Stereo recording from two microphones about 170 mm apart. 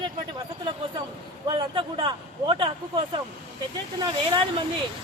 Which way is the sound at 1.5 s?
30° right (ahead or behind).